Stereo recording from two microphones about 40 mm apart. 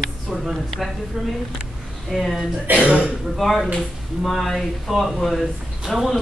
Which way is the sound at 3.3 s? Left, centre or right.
Centre.